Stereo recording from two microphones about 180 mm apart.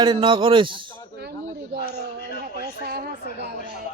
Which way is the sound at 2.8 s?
65° right (ahead or behind).